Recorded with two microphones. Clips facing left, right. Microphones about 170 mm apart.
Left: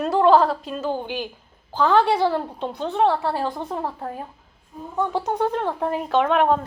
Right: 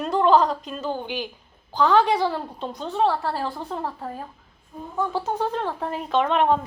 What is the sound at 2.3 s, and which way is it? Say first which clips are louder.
A woman's voice: left 4 dB; 10° left (ahead or behind).